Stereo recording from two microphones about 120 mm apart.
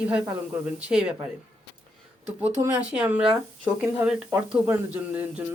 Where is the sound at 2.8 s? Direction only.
10° right (ahead or behind).